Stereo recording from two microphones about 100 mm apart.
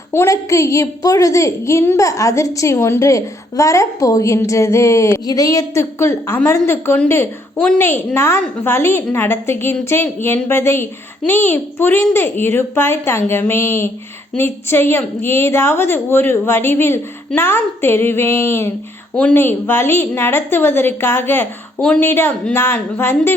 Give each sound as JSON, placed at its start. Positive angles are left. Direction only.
{"t": 0.1, "sound": "a woman's voice", "side_deg": 30}
{"t": 21.8, "sound": "speech", "side_deg": 10}
{"t": 22.0, "sound": "a woman's voice", "side_deg": 20}